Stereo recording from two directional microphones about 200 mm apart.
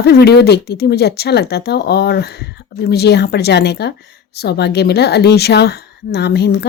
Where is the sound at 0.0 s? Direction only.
55° left (ahead or behind).